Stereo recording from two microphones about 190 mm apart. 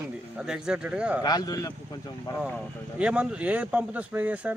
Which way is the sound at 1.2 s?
20° left (ahead or behind).